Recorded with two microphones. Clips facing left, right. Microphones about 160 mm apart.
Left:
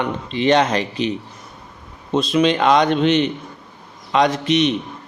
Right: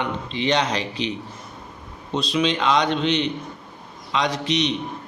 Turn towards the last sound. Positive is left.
turn(degrees=50)  # may be behind; listen again after turning